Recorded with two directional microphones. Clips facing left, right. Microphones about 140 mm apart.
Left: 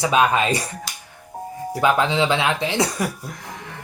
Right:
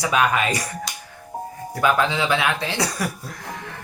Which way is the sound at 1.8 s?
20° left (ahead or behind).